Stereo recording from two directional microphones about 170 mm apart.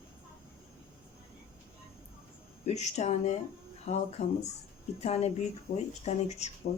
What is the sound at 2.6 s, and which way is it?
Speech, 40° left (ahead or behind).